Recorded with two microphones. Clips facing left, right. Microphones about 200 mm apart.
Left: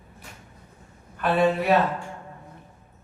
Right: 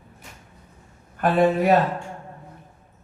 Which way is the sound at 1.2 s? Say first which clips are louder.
Right 3 dB; 45° right (ahead or behind).